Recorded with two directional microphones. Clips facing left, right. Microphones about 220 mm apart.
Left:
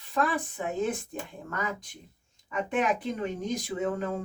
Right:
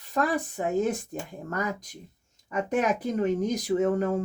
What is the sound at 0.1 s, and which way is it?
Speech, 40° right (ahead or behind).